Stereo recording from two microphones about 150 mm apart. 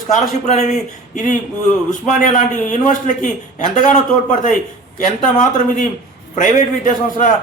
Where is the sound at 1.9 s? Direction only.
55° left (ahead or behind).